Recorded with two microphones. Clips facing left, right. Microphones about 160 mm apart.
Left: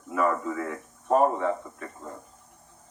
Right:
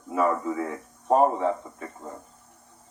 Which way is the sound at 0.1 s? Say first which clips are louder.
Right 2 dB; 30° right (ahead or behind).